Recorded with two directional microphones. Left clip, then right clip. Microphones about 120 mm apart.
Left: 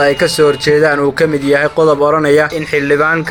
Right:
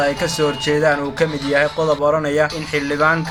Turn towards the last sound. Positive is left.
turn(degrees=70)  # may be behind; listen again after turning